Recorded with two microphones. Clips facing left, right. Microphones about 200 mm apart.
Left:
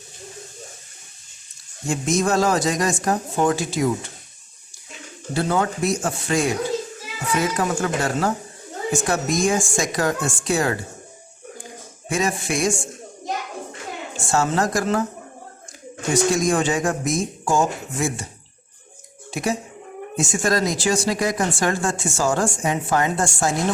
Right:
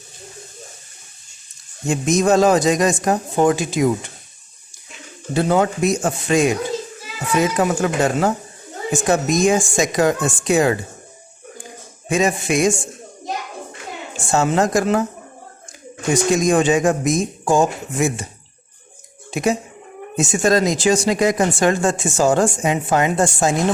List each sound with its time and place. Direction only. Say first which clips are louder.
1.9 s speech: right 5 dB; 20° right (ahead or behind)
5.3 s speech: right 5 dB; 20° right (ahead or behind)
12.0 s speech: right 5 dB; 20° right (ahead or behind)
14.3 s speech: right 4 dB; 20° right (ahead or behind)
16.3 s speech: right 5 dB; 20° right (ahead or behind)
19.3 s speech: right 5 dB; 20° right (ahead or behind)